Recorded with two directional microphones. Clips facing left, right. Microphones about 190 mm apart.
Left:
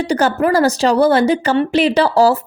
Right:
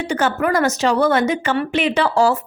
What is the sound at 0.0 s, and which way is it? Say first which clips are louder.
A woman's voice: left 4 dB; 35° left (ahead or behind).